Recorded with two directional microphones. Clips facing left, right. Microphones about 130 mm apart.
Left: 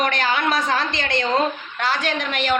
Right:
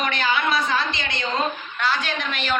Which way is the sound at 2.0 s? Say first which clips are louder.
Left 4 dB; 70° left (ahead or behind).